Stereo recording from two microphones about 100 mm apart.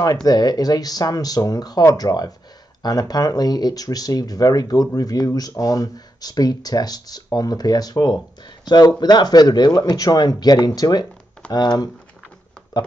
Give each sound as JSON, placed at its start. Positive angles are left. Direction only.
{"t": 0.0, "sound": "speech", "side_deg": 40}